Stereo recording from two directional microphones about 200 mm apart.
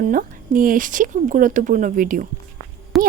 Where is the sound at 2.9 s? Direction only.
Centre (ahead or behind).